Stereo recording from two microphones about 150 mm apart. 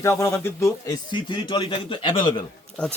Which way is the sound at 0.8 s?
30° left (ahead or behind).